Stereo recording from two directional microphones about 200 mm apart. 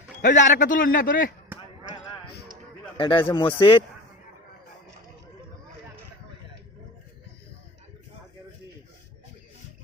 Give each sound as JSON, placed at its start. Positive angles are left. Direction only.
{"t": 0.2, "sound": "a man's voice", "side_deg": 40}
{"t": 3.0, "sound": "speech", "side_deg": 25}